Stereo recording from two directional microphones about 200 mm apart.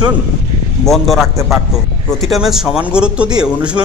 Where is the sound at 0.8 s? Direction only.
Centre (ahead or behind).